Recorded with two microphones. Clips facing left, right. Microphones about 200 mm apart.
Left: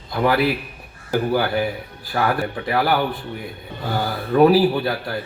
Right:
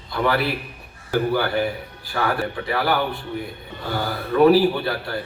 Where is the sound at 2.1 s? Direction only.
40° left (ahead or behind).